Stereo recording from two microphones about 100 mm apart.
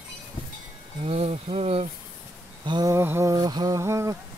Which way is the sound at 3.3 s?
45° right (ahead or behind).